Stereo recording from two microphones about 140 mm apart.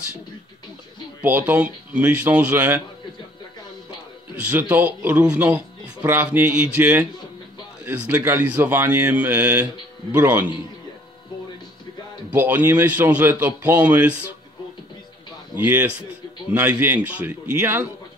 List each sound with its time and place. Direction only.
1.2 s speech: 15° right (ahead or behind)
4.4 s speech: 15° right (ahead or behind)
12.3 s speech: 10° right (ahead or behind)
15.5 s speech: 15° right (ahead or behind)